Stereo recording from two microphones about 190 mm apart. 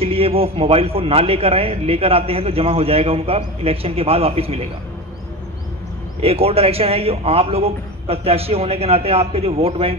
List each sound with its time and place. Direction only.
0.0 s a man's voice: 30° right (ahead or behind)
6.2 s a man's voice: 30° right (ahead or behind)